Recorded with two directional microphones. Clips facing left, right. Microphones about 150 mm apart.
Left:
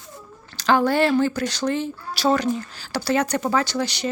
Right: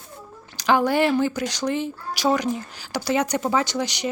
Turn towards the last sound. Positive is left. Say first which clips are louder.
# left 1 dB
turn(degrees=-15)  # may be behind; listen again after turning